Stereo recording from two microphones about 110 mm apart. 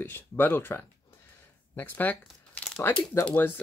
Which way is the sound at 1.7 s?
15° left (ahead or behind).